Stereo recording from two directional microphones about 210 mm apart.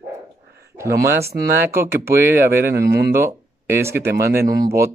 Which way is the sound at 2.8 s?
50° right (ahead or behind).